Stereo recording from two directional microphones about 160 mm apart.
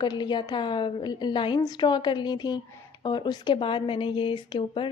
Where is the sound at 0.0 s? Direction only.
25° left (ahead or behind).